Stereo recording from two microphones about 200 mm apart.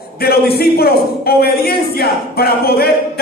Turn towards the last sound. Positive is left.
turn(degrees=50)  # may be behind; listen again after turning